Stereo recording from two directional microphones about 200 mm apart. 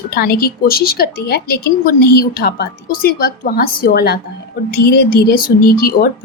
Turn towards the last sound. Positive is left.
turn(degrees=50)  # may be behind; listen again after turning